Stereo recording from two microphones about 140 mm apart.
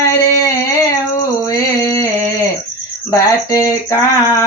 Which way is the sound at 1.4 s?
25° left (ahead or behind).